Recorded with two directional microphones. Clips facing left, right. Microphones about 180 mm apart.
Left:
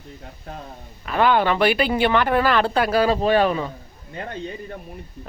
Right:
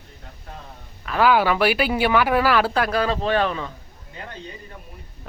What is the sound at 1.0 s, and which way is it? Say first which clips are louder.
Speech: even; centre (ahead or behind).